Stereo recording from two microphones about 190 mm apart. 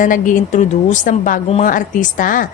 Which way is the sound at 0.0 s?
40° left (ahead or behind).